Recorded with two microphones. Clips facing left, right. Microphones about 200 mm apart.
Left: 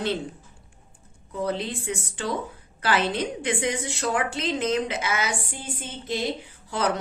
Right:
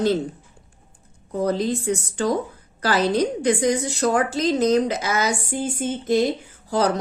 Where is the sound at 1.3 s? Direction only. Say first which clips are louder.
Right 6 dB; 40° right (ahead or behind).